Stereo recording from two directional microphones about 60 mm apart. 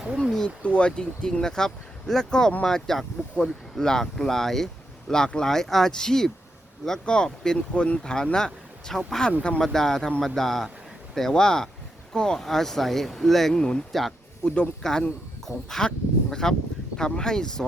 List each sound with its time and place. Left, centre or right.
0.2 s a sound: centre
0.6 s speech: centre
9.4 s speech: centre
9.7 s speech: centre